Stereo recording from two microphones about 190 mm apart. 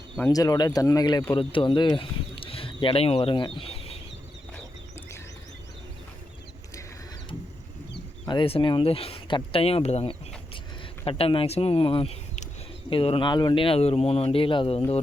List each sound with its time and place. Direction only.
0.2 s speech: 15° left (ahead or behind)
8.3 s speech: 30° left (ahead or behind)